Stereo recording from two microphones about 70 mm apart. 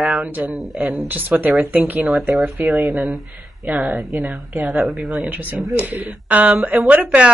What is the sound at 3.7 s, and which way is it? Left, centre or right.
Speech, right.